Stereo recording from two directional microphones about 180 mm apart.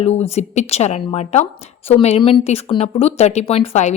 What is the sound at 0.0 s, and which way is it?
Speech, 35° left (ahead or behind).